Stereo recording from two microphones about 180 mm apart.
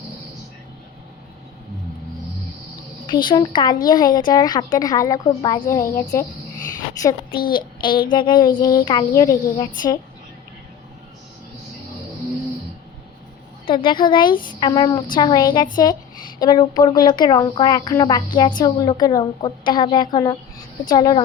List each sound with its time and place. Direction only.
3.1 s a woman's voice: 25° left (ahead or behind)
7.3 s a child's voice: 55° left (ahead or behind)
7.8 s a woman's voice: 25° left (ahead or behind)
13.7 s a woman's voice: 30° left (ahead or behind)